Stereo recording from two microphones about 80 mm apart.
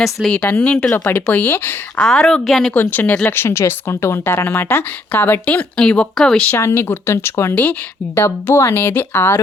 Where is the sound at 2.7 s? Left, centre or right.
Left.